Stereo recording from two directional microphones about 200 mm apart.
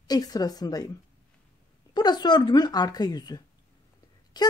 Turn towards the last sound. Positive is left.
turn(degrees=20)  # may be behind; listen again after turning